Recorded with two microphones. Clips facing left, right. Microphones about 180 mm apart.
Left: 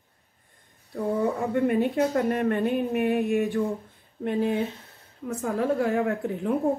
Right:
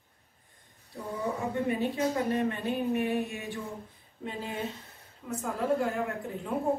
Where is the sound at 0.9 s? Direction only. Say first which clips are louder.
Left 8 dB; 60° left (ahead or behind).